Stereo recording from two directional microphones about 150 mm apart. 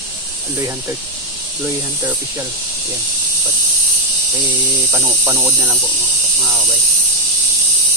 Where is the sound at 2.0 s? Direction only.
15° right (ahead or behind).